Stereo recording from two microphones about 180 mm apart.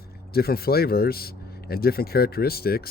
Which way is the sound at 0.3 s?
60° left (ahead or behind).